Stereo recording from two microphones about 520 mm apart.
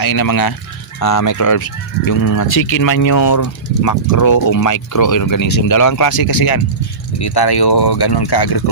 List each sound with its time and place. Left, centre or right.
0.0 s speech: left